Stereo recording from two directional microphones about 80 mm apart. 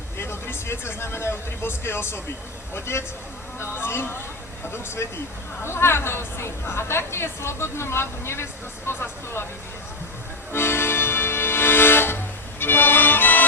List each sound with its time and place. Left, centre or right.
0.2 s a woman's voice: left
10.5 s music: left